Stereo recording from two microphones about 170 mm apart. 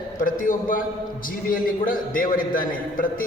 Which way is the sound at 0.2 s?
50° left (ahead or behind).